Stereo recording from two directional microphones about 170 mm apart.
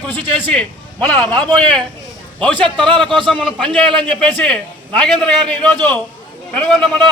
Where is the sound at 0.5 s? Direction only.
10° left (ahead or behind).